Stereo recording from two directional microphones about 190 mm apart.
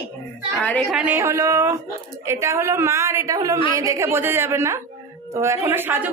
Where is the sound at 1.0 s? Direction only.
10° right (ahead or behind).